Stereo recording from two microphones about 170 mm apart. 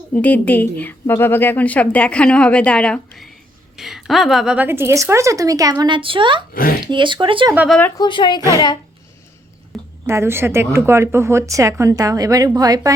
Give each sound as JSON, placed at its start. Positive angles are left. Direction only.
{"t": 0.1, "sound": "a woman's voice", "side_deg": 10}
{"t": 6.5, "sound": "speech", "side_deg": 55}
{"t": 6.9, "sound": "speech", "side_deg": -30}
{"t": 7.7, "sound": "a woman's voice", "side_deg": 10}
{"t": 7.9, "sound": "a woman's voice", "side_deg": 25}
{"t": 8.4, "sound": "speech", "side_deg": -20}
{"t": 9.7, "sound": "a sound", "side_deg": 0}
{"t": 10.1, "sound": "a woman's voice", "side_deg": -15}